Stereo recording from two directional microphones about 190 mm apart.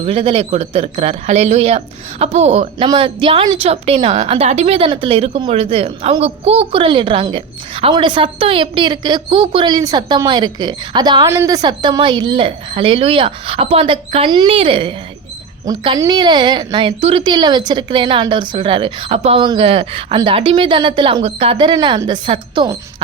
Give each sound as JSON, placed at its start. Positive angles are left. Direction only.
{"t": 0.0, "sound": "speech", "side_deg": -30}